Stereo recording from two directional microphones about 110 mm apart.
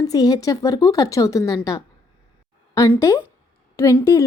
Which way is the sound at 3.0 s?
25° left (ahead or behind).